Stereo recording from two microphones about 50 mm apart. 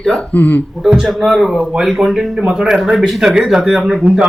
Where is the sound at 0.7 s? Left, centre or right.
Centre.